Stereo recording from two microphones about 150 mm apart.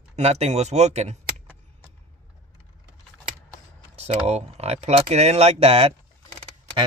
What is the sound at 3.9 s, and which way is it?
Speech, 45° right (ahead or behind).